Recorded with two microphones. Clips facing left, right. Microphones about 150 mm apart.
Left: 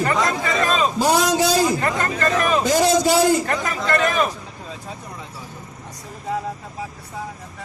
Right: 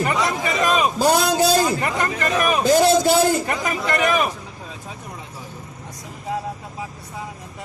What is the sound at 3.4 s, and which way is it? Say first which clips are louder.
Speech: even; 15° right (ahead or behind).